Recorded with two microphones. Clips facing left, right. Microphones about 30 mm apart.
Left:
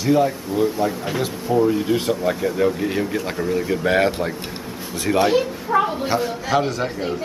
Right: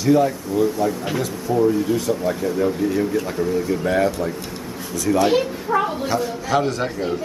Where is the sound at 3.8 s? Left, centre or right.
Left.